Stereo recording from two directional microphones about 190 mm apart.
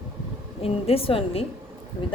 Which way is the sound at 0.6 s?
30° left (ahead or behind).